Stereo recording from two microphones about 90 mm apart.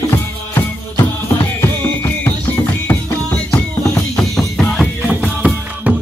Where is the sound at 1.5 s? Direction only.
25° left (ahead or behind).